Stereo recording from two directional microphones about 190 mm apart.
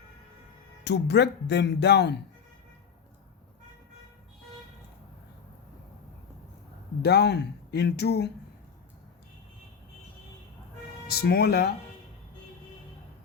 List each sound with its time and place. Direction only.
0.9 s speech: 60° left (ahead or behind)
7.0 s speech: 60° left (ahead or behind)
11.2 s speech: 55° left (ahead or behind)